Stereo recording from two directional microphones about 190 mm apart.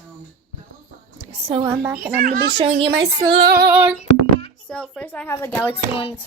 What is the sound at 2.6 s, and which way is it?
Speech, 30° right (ahead or behind).